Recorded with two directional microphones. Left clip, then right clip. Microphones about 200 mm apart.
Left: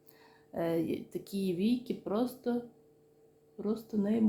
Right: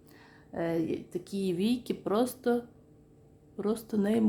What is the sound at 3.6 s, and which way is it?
Speech, 25° right (ahead or behind).